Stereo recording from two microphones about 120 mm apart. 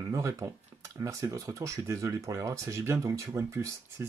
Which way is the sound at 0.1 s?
25° right (ahead or behind).